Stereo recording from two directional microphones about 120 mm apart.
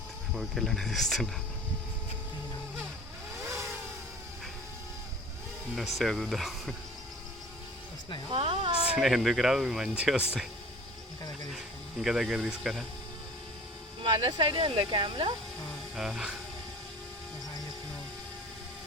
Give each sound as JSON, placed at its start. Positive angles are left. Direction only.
{"t": 0.3, "sound": "speech", "side_deg": 0}
{"t": 3.4, "sound": "vehicle", "side_deg": -25}
{"t": 5.7, "sound": "speech", "side_deg": 0}
{"t": 8.3, "sound": "speech", "side_deg": -50}
{"t": 8.9, "sound": "speech", "side_deg": -5}
{"t": 11.5, "sound": "speech", "side_deg": -5}
{"t": 14.0, "sound": "speech", "side_deg": -40}
{"t": 16.0, "sound": "speech", "side_deg": -5}